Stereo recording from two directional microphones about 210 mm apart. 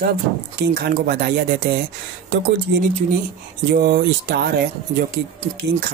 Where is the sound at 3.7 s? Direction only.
50° right (ahead or behind).